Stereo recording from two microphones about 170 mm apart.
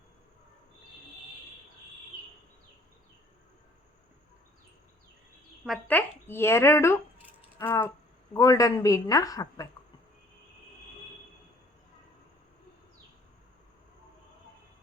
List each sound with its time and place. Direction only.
5.9 s speech: 10° left (ahead or behind)
7.6 s a sound: 15° left (ahead or behind)
8.3 s a woman's voice: 20° left (ahead or behind)